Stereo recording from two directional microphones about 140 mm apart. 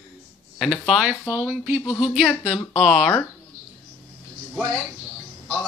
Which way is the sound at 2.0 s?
Centre (ahead or behind).